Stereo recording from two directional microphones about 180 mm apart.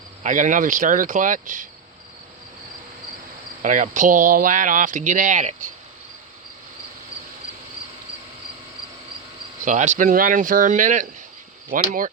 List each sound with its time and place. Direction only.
0.2 s speech: 45° right (ahead or behind)
3.6 s speech: 45° right (ahead or behind)
9.6 s speech: 40° right (ahead or behind)